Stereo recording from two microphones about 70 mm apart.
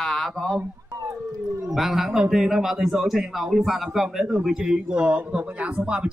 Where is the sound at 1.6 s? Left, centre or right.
Centre.